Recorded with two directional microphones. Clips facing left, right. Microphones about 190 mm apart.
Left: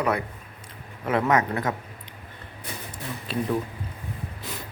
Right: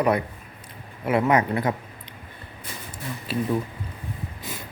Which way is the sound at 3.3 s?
5° right (ahead or behind).